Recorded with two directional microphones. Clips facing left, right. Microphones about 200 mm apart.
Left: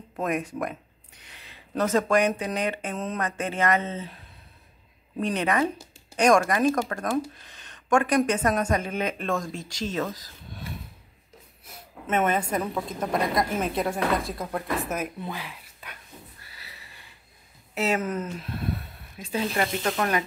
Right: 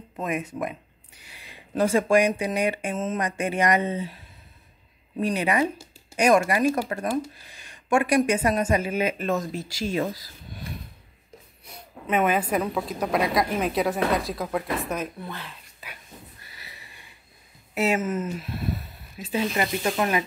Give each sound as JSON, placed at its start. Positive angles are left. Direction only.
{"t": 0.1, "sound": "speech", "side_deg": 0}
{"t": 5.2, "sound": "speech", "side_deg": -10}
{"t": 10.1, "sound": "a sound", "side_deg": -10}
{"t": 11.6, "sound": "a woman's voice", "side_deg": 0}
{"t": 17.7, "sound": "speech", "side_deg": -10}